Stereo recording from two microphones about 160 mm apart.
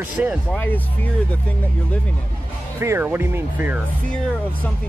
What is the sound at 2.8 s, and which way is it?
Speech, 15° right (ahead or behind).